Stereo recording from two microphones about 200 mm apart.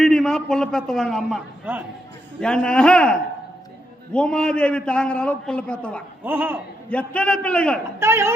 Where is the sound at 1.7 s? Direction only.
10° right (ahead or behind).